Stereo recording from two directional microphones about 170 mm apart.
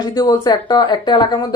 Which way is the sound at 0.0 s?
25° left (ahead or behind).